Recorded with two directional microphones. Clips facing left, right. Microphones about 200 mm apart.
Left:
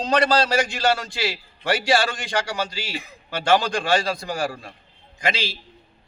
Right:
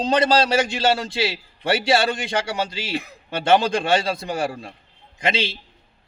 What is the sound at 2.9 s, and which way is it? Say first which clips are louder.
Speech: right 6 dB; 65° right (ahead or behind).